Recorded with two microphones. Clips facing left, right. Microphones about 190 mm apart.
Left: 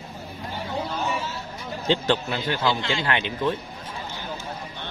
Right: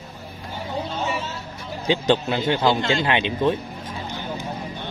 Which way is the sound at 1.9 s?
20° right (ahead or behind).